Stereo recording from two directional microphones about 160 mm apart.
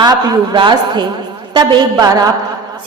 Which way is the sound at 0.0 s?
30° right (ahead or behind).